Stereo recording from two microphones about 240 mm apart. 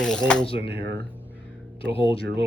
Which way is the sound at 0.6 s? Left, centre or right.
Right.